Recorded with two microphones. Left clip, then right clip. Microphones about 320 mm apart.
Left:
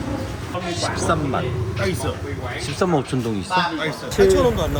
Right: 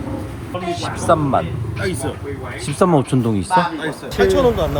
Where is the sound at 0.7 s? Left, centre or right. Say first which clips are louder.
Right 5 dB; centre.